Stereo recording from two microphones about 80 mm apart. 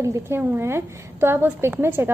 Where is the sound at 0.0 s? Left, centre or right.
Right.